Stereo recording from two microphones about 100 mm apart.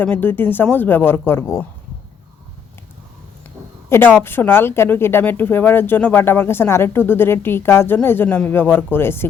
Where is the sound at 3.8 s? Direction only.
25° left (ahead or behind).